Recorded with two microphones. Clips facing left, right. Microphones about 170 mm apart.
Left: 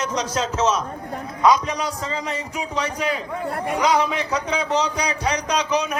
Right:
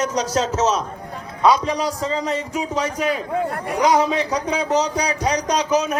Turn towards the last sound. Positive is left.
turn(degrees=-40)  # may be behind; listen again after turning